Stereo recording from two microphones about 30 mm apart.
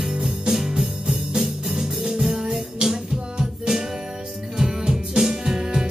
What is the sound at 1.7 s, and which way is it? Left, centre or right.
Music, right.